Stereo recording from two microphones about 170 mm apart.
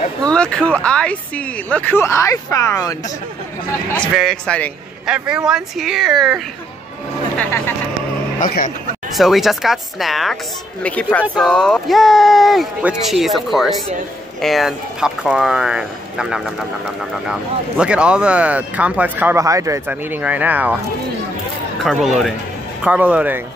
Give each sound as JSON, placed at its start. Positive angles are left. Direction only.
{"t": 0.2, "sound": "speech", "side_deg": 5}
{"t": 4.1, "sound": "speech", "side_deg": 0}
{"t": 7.3, "sound": "speech", "side_deg": 10}
{"t": 8.4, "sound": "speech", "side_deg": 50}
{"t": 9.1, "sound": "speech", "side_deg": 0}
{"t": 21.8, "sound": "speech", "side_deg": 0}